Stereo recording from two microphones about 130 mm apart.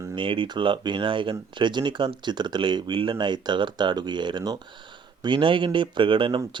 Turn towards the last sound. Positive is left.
turn(degrees=-40)  # may be behind; listen again after turning